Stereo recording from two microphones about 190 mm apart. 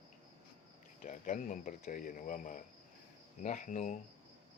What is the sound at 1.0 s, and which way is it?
Speech, 40° left (ahead or behind).